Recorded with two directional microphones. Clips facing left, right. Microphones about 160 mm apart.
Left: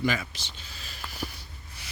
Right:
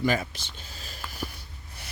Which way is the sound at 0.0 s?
45° right (ahead or behind).